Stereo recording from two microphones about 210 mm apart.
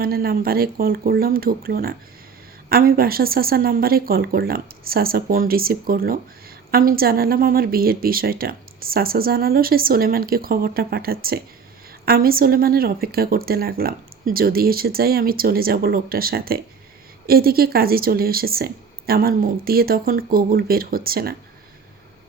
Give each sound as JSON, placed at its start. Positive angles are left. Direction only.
{"t": 0.0, "sound": "speech", "side_deg": -45}